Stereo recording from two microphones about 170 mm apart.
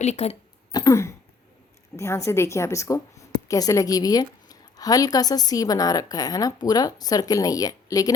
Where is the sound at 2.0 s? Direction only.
15° left (ahead or behind).